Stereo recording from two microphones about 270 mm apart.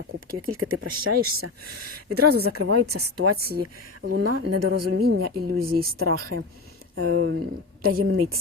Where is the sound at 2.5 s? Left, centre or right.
Right.